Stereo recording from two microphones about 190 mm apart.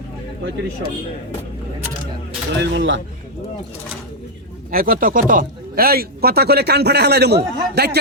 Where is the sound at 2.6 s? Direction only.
75° right (ahead or behind).